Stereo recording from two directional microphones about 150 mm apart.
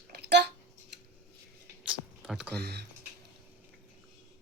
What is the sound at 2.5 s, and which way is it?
Speech, 90° right.